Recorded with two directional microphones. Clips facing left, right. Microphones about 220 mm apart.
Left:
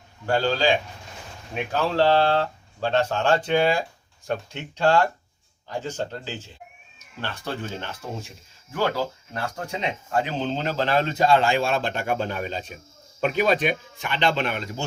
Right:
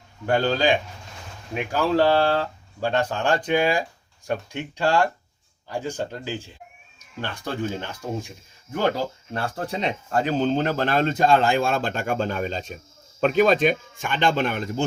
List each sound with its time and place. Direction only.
0.3 s a man's voice: 20° right (ahead or behind)
1.7 s speech: 10° right (ahead or behind)
9.3 s speech: 35° right (ahead or behind); by 14.8 s 50° right (ahead or behind)